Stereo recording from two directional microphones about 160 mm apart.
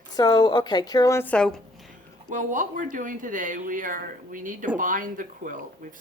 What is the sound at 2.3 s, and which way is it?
Speech, 55° right (ahead or behind).